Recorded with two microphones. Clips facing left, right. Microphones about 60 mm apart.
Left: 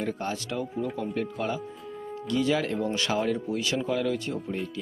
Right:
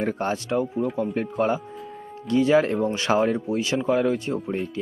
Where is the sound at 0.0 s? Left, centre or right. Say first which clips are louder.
Right 5 dB; right.